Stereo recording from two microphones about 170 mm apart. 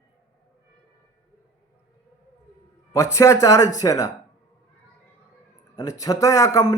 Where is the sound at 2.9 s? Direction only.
20° left (ahead or behind).